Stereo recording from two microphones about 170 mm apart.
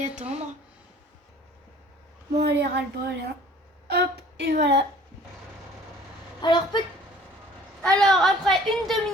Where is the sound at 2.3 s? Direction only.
75° right (ahead or behind).